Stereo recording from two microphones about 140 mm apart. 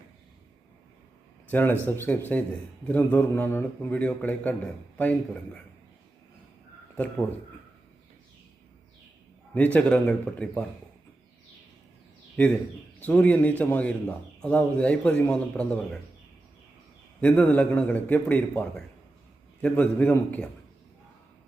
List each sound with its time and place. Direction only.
1.5 s a man's voice: 15° left (ahead or behind)
6.9 s a man's voice: 5° left (ahead or behind)
9.7 s a man's voice: 10° left (ahead or behind)
13.0 s a man's voice: 10° left (ahead or behind)
17.2 s a man's voice: 10° left (ahead or behind)